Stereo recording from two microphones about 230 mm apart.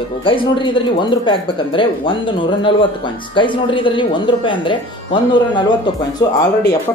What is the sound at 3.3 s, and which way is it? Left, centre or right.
Speech, left.